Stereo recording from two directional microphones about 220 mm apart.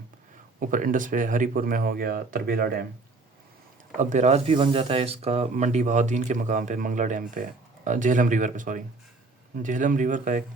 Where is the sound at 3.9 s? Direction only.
30° right (ahead or behind).